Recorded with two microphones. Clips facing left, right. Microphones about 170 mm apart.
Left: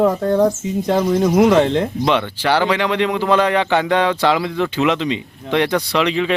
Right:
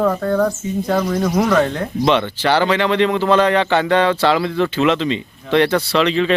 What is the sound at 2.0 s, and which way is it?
A man's voice, 10° left (ahead or behind).